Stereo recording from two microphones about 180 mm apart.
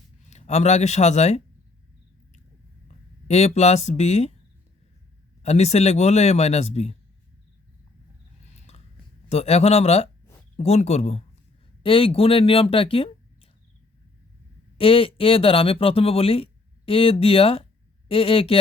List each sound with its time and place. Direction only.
0.3 s speech: 40° left (ahead or behind)
3.2 s speech: 35° left (ahead or behind)
5.4 s speech: 35° left (ahead or behind)
8.5 s a sound: 40° left (ahead or behind)
9.3 s speech: 35° left (ahead or behind)
14.8 s speech: 30° left (ahead or behind)